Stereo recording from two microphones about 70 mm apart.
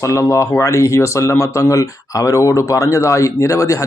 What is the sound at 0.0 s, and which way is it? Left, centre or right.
Speech, left.